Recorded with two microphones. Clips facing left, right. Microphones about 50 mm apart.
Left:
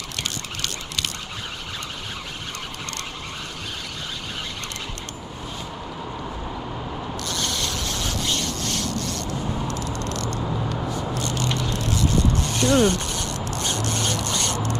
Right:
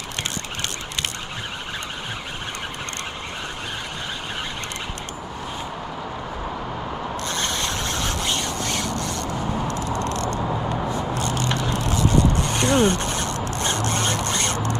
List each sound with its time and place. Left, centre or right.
7.2 s rub: right
11.1 s biting: right
11.4 s vehicle: centre; by 14.8 s right